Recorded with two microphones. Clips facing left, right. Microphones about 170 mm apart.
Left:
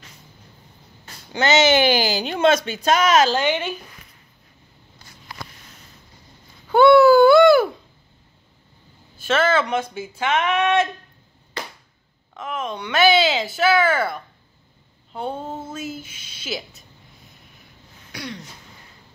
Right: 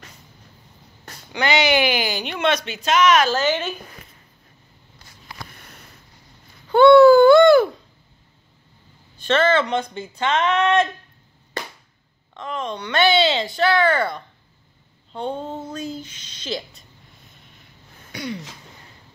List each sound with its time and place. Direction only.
1.6 s speech: 25° left (ahead or behind)
3.3 s speech: 10° left (ahead or behind)
6.7 s a sound: 5° left (ahead or behind)
9.2 s speech: 5° left (ahead or behind)
12.4 s speech: 5° left (ahead or behind)
18.1 s a sound: centre (ahead or behind)